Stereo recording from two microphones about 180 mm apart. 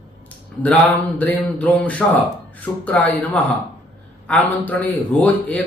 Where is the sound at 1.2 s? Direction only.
10° left (ahead or behind).